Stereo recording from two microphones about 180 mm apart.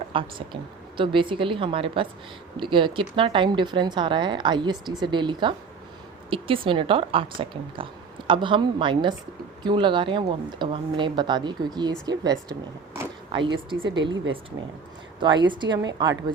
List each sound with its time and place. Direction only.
0.1 s speech: 30° right (ahead or behind)